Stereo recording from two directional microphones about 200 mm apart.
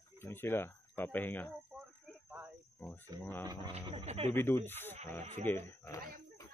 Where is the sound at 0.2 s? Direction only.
10° left (ahead or behind).